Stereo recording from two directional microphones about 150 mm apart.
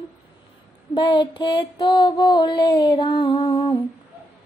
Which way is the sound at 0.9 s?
30° left (ahead or behind).